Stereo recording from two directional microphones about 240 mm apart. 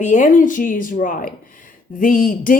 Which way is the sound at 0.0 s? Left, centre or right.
Left.